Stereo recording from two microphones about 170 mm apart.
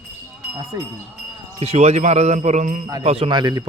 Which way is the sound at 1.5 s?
35° right (ahead or behind).